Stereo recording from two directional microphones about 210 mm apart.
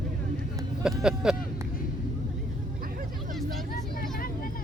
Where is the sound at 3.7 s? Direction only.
40° left (ahead or behind).